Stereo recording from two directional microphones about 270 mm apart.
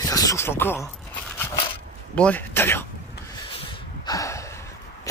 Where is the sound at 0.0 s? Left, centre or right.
Centre.